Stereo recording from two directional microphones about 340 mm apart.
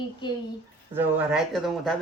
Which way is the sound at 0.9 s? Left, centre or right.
Centre.